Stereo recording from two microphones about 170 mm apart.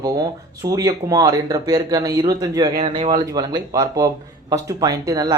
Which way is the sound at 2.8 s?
30° right (ahead or behind).